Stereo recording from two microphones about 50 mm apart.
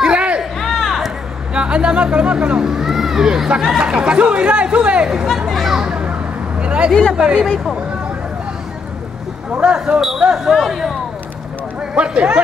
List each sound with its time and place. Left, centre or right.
0.0 s a sound: right
0.7 s music: centre
1.5 s speech: right
5.5 s children playing: centre
5.8 s children playing: centre
6.6 s a sound: right
7.2 s speech: centre
9.5 s speech: right
10.2 s speech: centre
11.9 s speech: right